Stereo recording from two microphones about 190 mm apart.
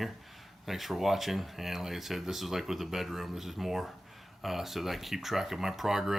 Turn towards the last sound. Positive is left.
turn(degrees=0)  # may be behind; listen again after turning